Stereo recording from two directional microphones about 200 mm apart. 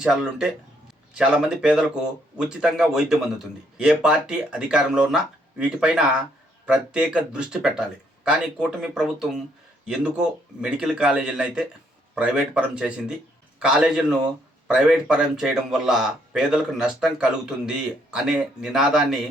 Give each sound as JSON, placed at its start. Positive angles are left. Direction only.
{"t": 0.0, "sound": "speech", "side_deg": -5}